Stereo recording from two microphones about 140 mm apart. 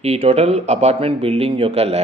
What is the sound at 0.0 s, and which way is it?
Speech, 45° right (ahead or behind).